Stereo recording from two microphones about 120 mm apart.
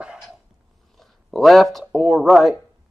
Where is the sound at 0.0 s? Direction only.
5° right (ahead or behind).